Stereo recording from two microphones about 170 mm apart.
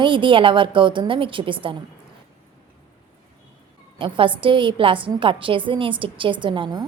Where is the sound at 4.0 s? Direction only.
30° right (ahead or behind).